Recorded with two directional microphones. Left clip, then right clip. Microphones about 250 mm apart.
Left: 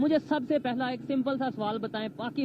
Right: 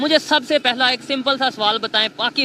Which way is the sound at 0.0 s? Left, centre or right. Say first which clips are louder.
Right 11 dB; centre.